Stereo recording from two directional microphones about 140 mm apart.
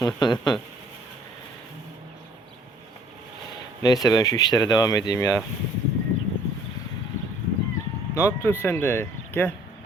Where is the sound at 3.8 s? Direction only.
25° left (ahead or behind).